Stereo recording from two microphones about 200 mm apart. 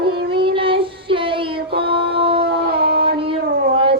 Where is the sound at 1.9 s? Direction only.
25° right (ahead or behind).